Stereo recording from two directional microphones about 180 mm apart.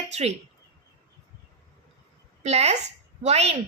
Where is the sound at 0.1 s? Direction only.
35° right (ahead or behind).